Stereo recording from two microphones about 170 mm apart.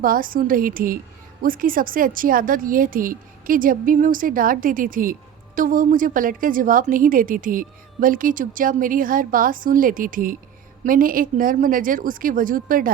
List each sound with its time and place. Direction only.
0.0 s a woman's voice: 55° right (ahead or behind)